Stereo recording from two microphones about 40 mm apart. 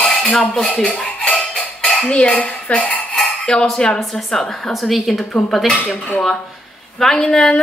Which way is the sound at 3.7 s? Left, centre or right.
Left.